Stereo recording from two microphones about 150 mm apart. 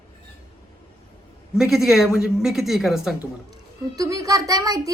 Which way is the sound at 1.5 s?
5° right (ahead or behind).